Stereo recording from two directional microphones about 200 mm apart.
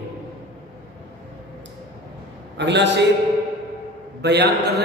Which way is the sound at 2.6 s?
60° right (ahead or behind).